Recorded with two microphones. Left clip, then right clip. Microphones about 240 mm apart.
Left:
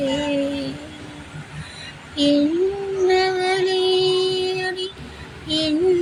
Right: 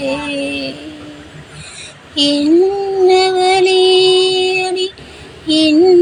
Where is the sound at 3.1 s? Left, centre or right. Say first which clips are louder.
Right 7 dB; centre.